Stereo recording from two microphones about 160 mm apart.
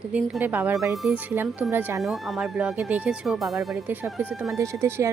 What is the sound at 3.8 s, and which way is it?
Speech, 10° right (ahead or behind).